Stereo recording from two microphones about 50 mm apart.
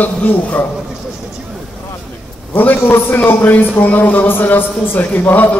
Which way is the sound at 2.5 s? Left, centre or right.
Left.